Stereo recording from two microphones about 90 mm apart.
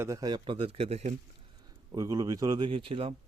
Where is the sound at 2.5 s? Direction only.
70° right (ahead or behind).